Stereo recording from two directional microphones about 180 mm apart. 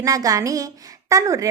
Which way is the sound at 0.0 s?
20° right (ahead or behind).